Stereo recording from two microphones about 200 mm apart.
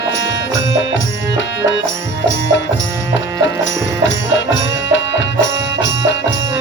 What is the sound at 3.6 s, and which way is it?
Music, 65° left (ahead or behind).